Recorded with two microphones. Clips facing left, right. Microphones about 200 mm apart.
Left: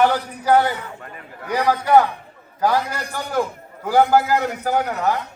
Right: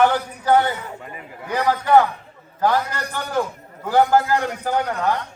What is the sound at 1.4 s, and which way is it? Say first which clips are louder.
A man's voice: left 1 dB; 10° left (ahead or behind).